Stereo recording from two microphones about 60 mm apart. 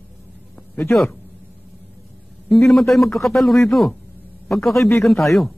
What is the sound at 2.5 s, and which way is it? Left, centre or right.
A man's voice, centre.